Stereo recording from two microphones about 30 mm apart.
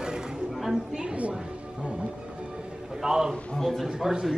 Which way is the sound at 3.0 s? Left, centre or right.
Centre.